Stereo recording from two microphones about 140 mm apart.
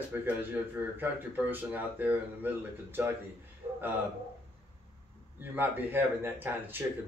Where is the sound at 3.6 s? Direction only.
50° right (ahead or behind).